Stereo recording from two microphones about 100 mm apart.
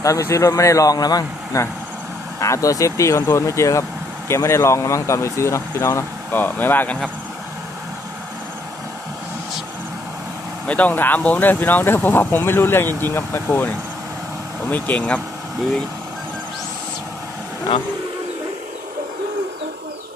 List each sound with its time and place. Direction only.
0.0 s speech: 35° left (ahead or behind)
10.7 s speech: 15° left (ahead or behind)
14.7 s speech: 15° left (ahead or behind)